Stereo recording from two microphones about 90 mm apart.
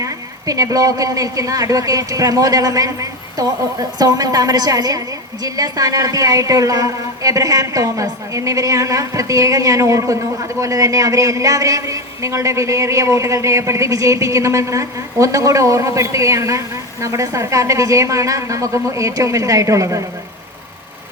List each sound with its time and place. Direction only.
0.0 s a woman's voice: 40° right (ahead or behind)